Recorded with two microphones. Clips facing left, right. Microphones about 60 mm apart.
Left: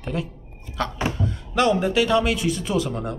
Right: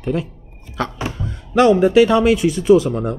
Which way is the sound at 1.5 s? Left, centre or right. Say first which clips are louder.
Right 8 dB; right.